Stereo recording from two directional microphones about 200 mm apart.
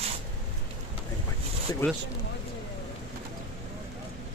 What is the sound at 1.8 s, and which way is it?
Speech, 10° left (ahead or behind).